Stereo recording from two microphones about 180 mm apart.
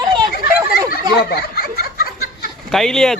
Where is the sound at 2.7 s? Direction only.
Centre (ahead or behind).